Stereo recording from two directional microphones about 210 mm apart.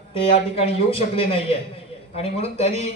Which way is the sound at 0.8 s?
25° left (ahead or behind).